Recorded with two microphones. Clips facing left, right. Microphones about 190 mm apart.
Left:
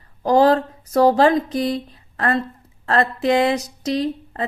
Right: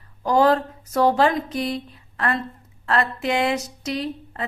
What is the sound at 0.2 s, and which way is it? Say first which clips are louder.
Speech: left 3 dB; 35° left (ahead or behind).